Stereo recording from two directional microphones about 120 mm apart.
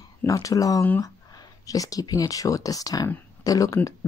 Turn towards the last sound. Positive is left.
turn(degrees=30)  # may be behind; listen again after turning